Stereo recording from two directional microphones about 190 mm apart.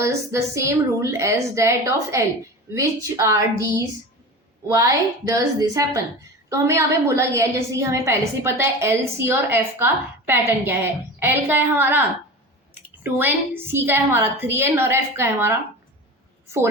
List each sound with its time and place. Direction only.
0.0 s a woman's voice: 15° right (ahead or behind)